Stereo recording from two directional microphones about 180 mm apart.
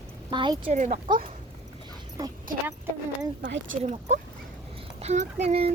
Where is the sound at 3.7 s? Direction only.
40° right (ahead or behind).